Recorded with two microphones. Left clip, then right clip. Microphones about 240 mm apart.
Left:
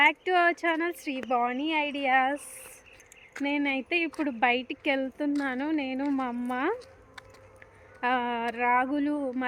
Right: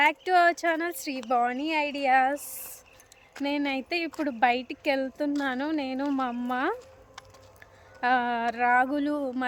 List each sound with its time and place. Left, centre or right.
0.0 s speech: centre
3.4 s speech: centre
8.0 s speech: centre